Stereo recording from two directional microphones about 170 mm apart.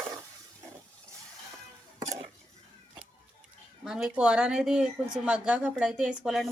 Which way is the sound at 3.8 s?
5° right (ahead or behind).